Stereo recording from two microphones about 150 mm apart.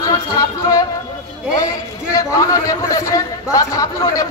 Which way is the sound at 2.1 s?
20° left (ahead or behind).